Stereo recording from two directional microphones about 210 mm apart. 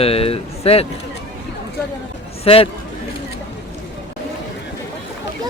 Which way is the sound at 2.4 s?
25° left (ahead or behind).